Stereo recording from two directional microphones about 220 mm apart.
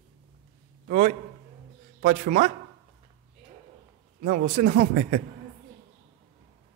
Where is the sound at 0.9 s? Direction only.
35° right (ahead or behind).